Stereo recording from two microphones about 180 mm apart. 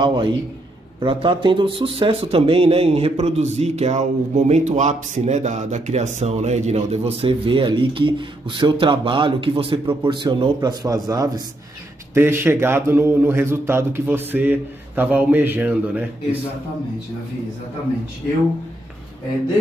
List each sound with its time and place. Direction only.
0.0 s a man's voice: 25° right (ahead or behind); by 16.0 s 10° right (ahead or behind)